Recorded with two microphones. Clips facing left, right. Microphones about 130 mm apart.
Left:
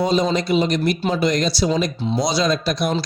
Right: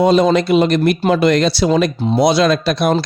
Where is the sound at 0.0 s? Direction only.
60° right (ahead or behind).